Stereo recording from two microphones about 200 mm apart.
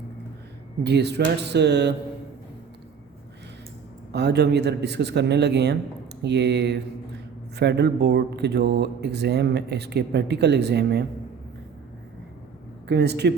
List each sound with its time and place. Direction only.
0.9 s speech: 55° right (ahead or behind)
4.1 s speech: 55° right (ahead or behind)
12.9 s speech: 55° right (ahead or behind)